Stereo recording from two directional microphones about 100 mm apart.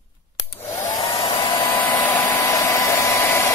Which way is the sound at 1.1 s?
55° left (ahead or behind).